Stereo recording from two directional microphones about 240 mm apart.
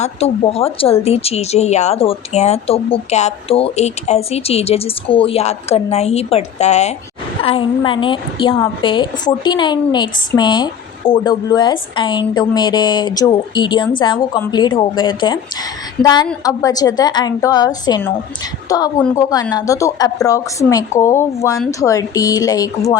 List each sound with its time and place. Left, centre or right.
0.0 s a woman's voice: left